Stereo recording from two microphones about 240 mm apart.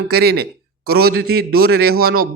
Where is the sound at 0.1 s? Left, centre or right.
Right.